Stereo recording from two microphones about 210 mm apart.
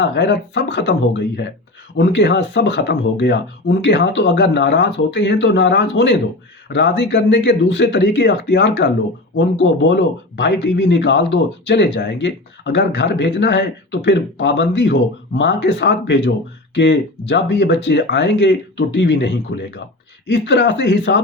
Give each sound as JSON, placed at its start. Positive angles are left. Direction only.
{"t": 0.0, "sound": "speech", "side_deg": 55}